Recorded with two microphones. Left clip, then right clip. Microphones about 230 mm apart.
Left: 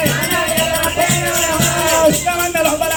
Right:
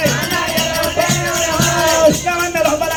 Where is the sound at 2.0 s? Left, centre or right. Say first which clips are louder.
Right 1 dB; right.